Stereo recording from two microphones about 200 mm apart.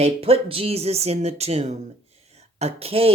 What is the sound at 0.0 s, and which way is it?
Speech, 30° right (ahead or behind).